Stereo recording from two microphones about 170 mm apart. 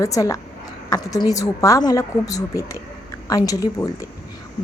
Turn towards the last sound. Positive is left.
turn(degrees=20)  # may be behind; listen again after turning